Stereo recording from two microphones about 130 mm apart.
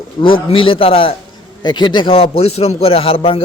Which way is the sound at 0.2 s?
40° left (ahead or behind).